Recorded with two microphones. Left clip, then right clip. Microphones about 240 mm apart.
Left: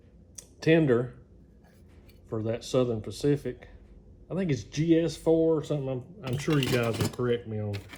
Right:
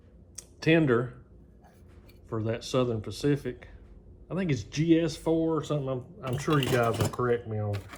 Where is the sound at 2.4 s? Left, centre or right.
Right.